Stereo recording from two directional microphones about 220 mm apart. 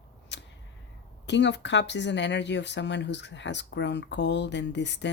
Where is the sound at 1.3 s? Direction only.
55° left (ahead or behind).